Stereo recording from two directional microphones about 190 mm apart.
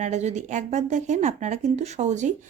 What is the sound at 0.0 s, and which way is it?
Speech, 35° right (ahead or behind).